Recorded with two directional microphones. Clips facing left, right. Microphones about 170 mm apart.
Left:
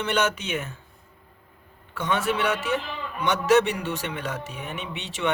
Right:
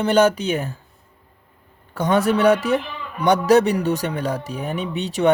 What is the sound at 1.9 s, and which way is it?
Speech, 40° right (ahead or behind).